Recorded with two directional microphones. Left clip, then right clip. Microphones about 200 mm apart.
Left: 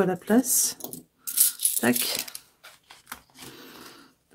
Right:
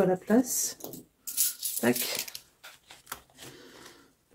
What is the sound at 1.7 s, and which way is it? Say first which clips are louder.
Speech: left 3 dB; 30° left (ahead or behind).